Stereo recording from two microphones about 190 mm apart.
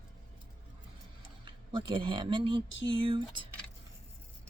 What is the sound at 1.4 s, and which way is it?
Speech, 25° right (ahead or behind).